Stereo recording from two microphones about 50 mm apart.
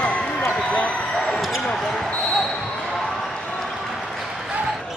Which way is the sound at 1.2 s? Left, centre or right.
Centre.